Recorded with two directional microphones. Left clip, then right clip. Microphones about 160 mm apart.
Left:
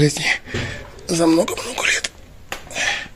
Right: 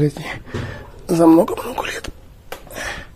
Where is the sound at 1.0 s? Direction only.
30° right (ahead or behind).